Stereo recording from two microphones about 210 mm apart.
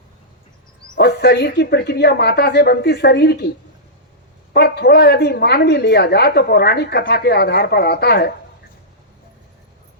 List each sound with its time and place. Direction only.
0.9 s a woman's voice: 50° left (ahead or behind)
4.5 s a woman's voice: 50° left (ahead or behind)